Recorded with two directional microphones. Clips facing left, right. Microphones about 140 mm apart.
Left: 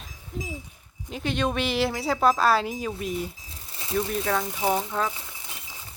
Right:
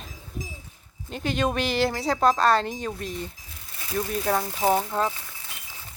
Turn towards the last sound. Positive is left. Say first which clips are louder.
# left 1 dB
turn(degrees=20)  # may be behind; listen again after turning